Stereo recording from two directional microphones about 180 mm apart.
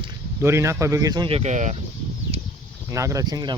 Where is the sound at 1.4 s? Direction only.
40° right (ahead or behind).